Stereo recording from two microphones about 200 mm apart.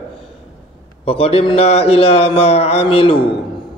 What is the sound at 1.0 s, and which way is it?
A man's voice, 30° left (ahead or behind).